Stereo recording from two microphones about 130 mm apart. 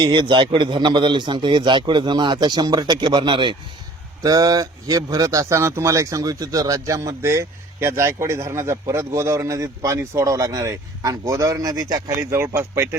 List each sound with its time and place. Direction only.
0.0 s a man's voice: 40° right (ahead or behind)
4.2 s speech: 30° right (ahead or behind)